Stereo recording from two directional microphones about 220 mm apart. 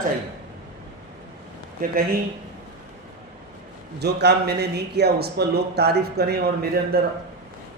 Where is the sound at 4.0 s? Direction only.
50° right (ahead or behind).